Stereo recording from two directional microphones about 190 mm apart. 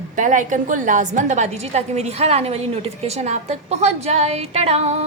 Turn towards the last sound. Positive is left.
turn(degrees=-35)  # may be behind; listen again after turning